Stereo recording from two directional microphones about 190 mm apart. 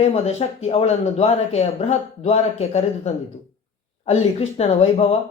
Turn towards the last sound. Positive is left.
turn(degrees=30)  # may be behind; listen again after turning